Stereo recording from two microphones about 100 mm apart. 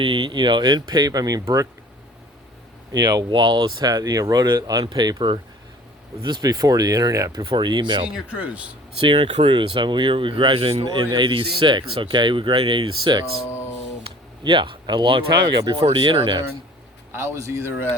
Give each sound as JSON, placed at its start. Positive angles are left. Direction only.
{"t": 0.0, "sound": "speech", "side_deg": -55}
{"t": 2.9, "sound": "speech", "side_deg": -40}
{"t": 7.3, "sound": "speech", "side_deg": -50}
{"t": 8.0, "sound": "speech", "side_deg": -10}
{"t": 9.0, "sound": "speech", "side_deg": -60}
{"t": 11.1, "sound": "speech", "side_deg": -50}
{"t": 14.4, "sound": "speech", "side_deg": -55}
{"t": 15.8, "sound": "speech", "side_deg": -80}
{"t": 16.0, "sound": "speech", "side_deg": -60}
{"t": 17.1, "sound": "speech", "side_deg": -25}